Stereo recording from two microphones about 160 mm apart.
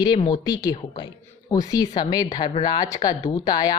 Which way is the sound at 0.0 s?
30° left (ahead or behind).